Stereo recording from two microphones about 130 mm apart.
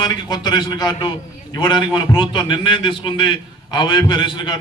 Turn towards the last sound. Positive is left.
turn(degrees=35)  # may be behind; listen again after turning